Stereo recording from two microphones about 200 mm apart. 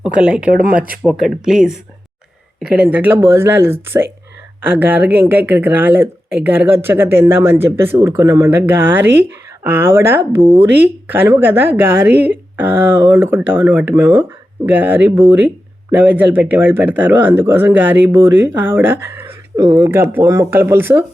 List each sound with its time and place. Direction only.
0.0 s speech: 5° right (ahead or behind)
10.4 s speech: 25° right (ahead or behind)
10.7 s speech: 10° right (ahead or behind)